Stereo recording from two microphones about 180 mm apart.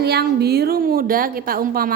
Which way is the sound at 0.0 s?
65° right (ahead or behind).